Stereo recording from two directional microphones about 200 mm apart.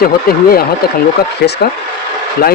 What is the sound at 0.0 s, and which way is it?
Speech, 50° left (ahead or behind).